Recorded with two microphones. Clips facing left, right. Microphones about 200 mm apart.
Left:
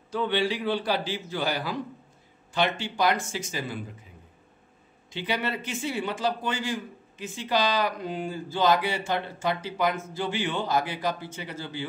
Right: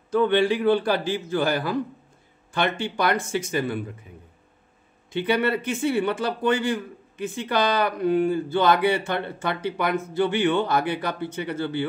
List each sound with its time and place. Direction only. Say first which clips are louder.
0.1 s a man's voice: right 7 dB; 50° right (ahead or behind)
5.1 s speech: right 7 dB; 55° right (ahead or behind)